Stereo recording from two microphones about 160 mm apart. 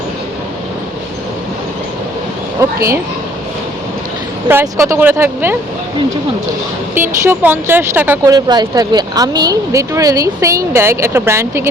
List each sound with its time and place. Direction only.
2.6 s speech: 20° right (ahead or behind)
4.4 s speech: 15° right (ahead or behind)
6.9 s speech: 15° right (ahead or behind)